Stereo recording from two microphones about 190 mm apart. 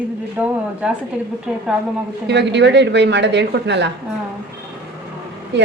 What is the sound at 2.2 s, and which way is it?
Speech, 65° right (ahead or behind).